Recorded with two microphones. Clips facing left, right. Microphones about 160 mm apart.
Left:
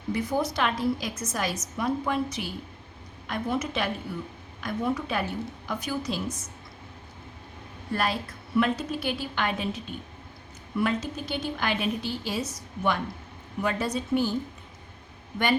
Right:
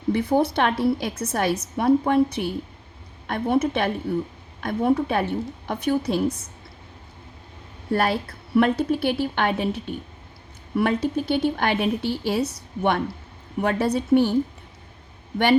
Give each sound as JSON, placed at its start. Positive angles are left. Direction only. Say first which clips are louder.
{"t": 0.1, "sound": "a woman's voice", "louder": "right 7 dB", "side_deg": -60}
{"t": 7.9, "sound": "a woman's voice", "louder": "right 6 dB", "side_deg": -60}